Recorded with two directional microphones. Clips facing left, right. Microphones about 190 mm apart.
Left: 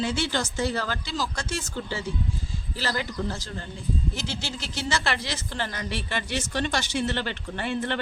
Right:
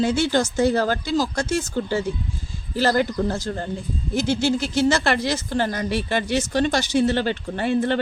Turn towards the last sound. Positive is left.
turn(degrees=-40)  # may be behind; listen again after turning